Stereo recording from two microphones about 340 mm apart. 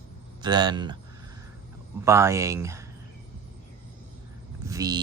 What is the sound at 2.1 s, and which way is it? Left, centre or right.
Speech, centre.